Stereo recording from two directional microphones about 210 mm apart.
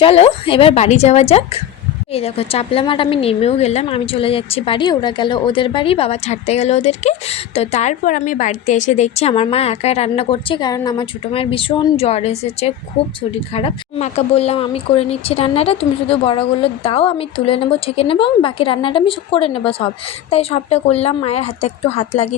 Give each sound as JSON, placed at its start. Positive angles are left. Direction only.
{"t": 0.0, "sound": "a woman's voice", "side_deg": 25}